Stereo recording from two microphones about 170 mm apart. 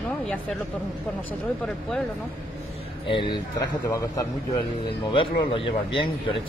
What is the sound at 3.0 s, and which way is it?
Speech, 30° left (ahead or behind).